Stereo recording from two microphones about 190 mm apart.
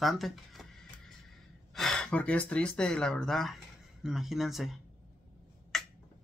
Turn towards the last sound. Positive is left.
turn(degrees=0)  # may be behind; listen again after turning